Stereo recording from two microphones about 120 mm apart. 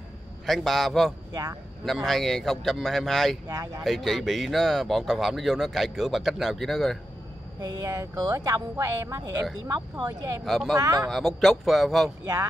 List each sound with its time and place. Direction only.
0.5 s speech: centre (ahead or behind)
1.3 s speech: 30° right (ahead or behind)
2.0 s speech: centre (ahead or behind)
3.4 s speech: 30° right (ahead or behind)
3.8 s speech: centre (ahead or behind)
7.6 s speech: 30° right (ahead or behind)
10.4 s speech: centre (ahead or behind)
10.8 s speech: 30° right (ahead or behind)
11.1 s speech: centre (ahead or behind)